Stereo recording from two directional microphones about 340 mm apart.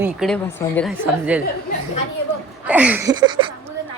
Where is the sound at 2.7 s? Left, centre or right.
Centre.